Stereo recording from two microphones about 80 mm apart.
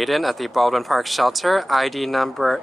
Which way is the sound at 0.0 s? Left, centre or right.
Centre.